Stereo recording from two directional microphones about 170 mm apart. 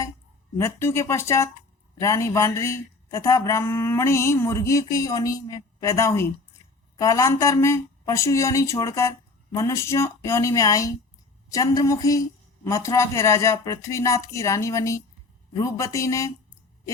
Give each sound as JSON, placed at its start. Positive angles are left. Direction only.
{"t": 0.6, "sound": "a woman's voice", "side_deg": 15}